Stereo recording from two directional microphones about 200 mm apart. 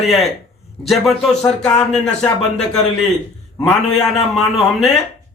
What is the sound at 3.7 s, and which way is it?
Speech, centre (ahead or behind).